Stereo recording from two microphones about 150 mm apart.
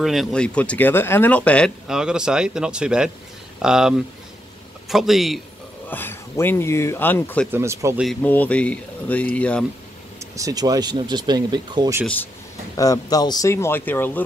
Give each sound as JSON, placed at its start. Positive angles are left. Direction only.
{"t": 0.0, "sound": "speech", "side_deg": 0}
{"t": 1.9, "sound": "a man's voice", "side_deg": -5}
{"t": 5.9, "sound": "speech", "side_deg": 15}
{"t": 7.5, "sound": "speech", "side_deg": -20}
{"t": 8.2, "sound": "speech", "side_deg": 10}
{"t": 10.3, "sound": "speech", "side_deg": -25}
{"t": 12.7, "sound": "speech", "side_deg": 25}